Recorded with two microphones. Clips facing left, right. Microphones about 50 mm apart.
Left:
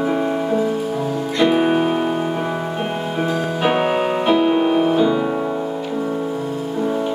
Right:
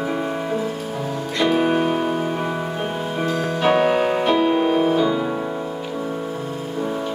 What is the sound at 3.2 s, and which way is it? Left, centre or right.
Music, centre.